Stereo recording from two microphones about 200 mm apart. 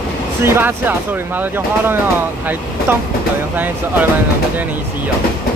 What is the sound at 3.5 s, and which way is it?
Speech, 10° right (ahead or behind).